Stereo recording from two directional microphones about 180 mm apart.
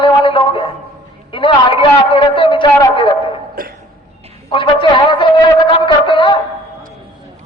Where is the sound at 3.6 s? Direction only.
50° right (ahead or behind).